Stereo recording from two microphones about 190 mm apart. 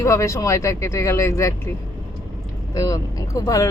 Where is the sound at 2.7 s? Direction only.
20° left (ahead or behind).